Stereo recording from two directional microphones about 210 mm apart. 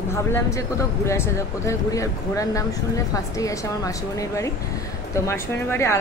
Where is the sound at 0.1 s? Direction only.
15° left (ahead or behind).